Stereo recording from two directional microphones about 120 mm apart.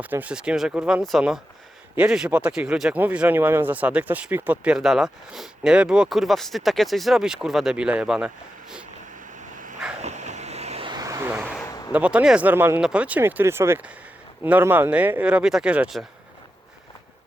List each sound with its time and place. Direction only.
0.0 s speech: 15° right (ahead or behind)
9.4 s dog: 90° right
10.0 s waves: 75° right (ahead or behind)
10.8 s vehicle: 30° right (ahead or behind)
11.9 s speech: 10° right (ahead or behind)